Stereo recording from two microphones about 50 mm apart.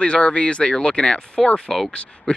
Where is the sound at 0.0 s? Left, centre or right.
Left.